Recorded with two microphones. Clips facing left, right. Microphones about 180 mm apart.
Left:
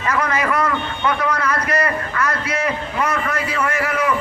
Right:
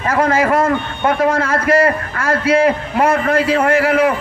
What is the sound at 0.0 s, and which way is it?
A man's voice, 50° right (ahead or behind).